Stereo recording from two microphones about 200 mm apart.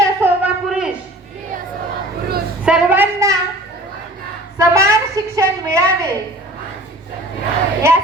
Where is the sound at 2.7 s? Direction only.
5° right (ahead or behind).